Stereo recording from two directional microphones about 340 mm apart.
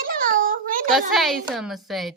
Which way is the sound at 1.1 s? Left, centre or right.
Centre.